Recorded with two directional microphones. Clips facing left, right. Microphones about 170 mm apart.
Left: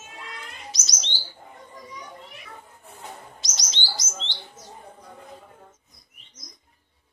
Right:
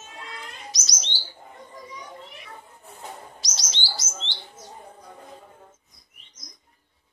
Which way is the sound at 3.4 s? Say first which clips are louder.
Even; 20° left (ahead or behind).